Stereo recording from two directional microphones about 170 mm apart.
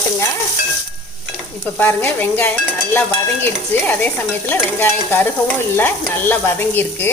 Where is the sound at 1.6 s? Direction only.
10° left (ahead or behind).